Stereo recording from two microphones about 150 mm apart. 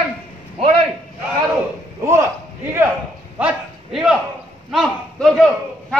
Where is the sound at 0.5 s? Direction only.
40° right (ahead or behind).